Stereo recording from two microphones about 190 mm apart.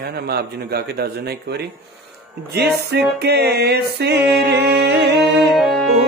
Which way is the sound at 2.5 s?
60° right (ahead or behind).